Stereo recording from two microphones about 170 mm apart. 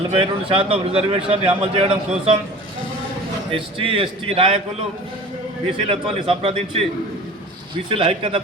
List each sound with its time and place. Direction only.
0.1 s speech: 35° right (ahead or behind)
3.5 s speech: 35° right (ahead or behind)
5.9 s speech: 35° right (ahead or behind)
7.9 s speech: 30° right (ahead or behind)